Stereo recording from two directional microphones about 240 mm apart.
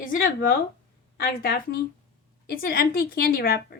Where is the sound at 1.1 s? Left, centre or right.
Left.